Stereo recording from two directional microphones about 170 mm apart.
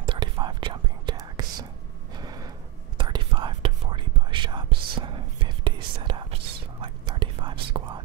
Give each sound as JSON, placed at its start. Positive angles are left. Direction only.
{"t": 0.0, "sound": "whispering", "side_deg": -30}
{"t": 2.1, "sound": "a sound", "side_deg": -25}
{"t": 3.0, "sound": "whispering", "side_deg": -25}